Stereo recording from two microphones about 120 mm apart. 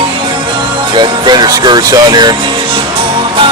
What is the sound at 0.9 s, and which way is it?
Speech, 40° right (ahead or behind).